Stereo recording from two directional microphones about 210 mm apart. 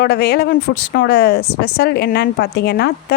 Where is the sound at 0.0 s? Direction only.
50° left (ahead or behind).